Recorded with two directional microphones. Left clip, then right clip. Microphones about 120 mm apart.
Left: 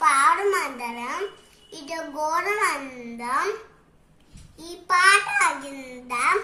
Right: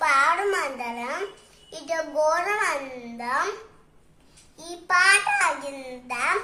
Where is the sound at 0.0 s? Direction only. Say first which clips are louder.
Left 2 dB; 15° right (ahead or behind).